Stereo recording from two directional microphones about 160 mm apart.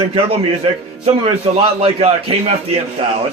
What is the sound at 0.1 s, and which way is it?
A man's voice, 35° right (ahead or behind).